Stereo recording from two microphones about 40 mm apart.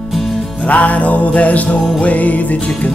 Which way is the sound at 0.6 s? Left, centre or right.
Left.